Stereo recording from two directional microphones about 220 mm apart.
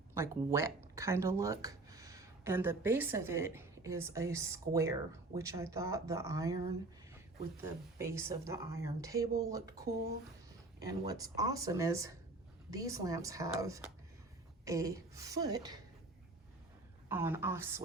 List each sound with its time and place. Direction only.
0.1 s speech: 10° right (ahead or behind)
7.9 s speech: 10° right (ahead or behind)
17.1 s speech: 10° right (ahead or behind)